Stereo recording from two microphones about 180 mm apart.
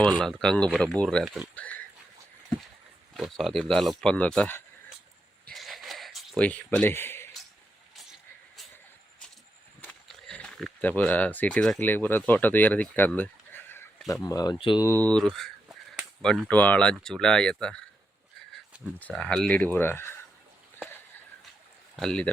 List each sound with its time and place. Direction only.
0.0 s speech: 5° left (ahead or behind)
3.2 s speech: centre (ahead or behind)
5.5 s a sound: centre (ahead or behind)
9.8 s speech: 5° left (ahead or behind); by 14.8 s 25° left (ahead or behind)
14.8 s speech: 10° left (ahead or behind)
18.9 s speech: 5° left (ahead or behind)
21.9 s speech: 5° left (ahead or behind)